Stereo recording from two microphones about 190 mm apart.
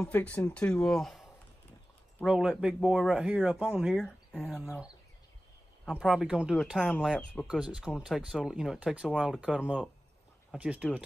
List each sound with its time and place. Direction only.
0.0 s speech: 5° left (ahead or behind)
2.2 s speech: 5° right (ahead or behind)
5.9 s speech: 5° right (ahead or behind)